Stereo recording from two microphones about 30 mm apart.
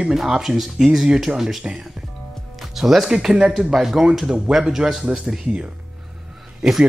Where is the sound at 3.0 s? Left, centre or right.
Centre.